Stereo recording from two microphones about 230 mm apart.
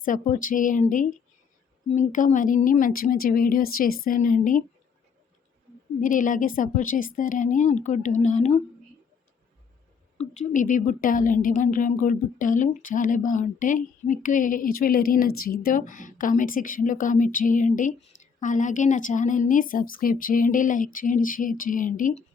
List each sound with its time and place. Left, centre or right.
0.0 s a woman's voice: left
6.0 s a woman's voice: left
10.2 s a woman's voice: left